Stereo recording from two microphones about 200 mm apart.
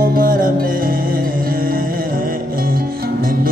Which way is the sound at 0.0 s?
45° right (ahead or behind).